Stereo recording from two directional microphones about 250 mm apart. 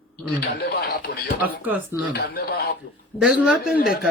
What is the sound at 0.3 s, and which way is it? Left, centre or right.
A man's voice, left.